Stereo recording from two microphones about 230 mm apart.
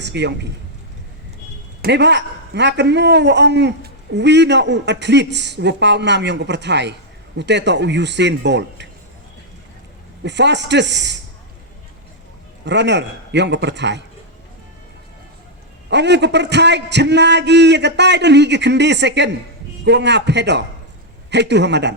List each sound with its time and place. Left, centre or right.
0.0 s a man's voice: right
1.8 s a man's voice: right
10.2 s a man's voice: right
12.6 s a man's voice: right
15.9 s a man's voice: right